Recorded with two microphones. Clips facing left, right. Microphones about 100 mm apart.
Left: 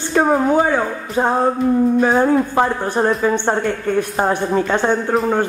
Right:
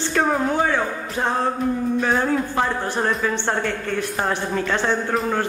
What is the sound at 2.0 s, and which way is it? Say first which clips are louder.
Speech: left 6 dB; 45° left (ahead or behind).